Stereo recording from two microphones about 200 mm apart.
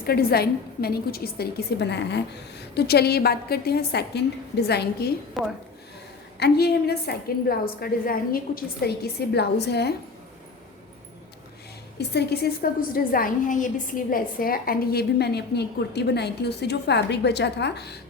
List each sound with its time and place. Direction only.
0.0 s a woman's voice: 50° left (ahead or behind)
6.4 s a woman's voice: 55° left (ahead or behind)
11.9 s a woman's voice: 55° left (ahead or behind)